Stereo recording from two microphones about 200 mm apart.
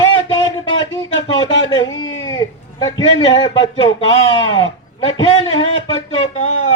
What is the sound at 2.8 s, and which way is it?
Speech, 25° left (ahead or behind).